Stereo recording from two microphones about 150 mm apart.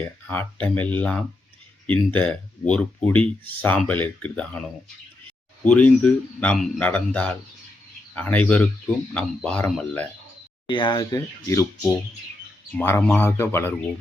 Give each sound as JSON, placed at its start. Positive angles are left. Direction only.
{"t": 0.3, "sound": "speech", "side_deg": 10}
{"t": 5.6, "sound": "speech", "side_deg": 10}
{"t": 10.7, "sound": "speech", "side_deg": 30}
{"t": 12.7, "sound": "speech", "side_deg": 10}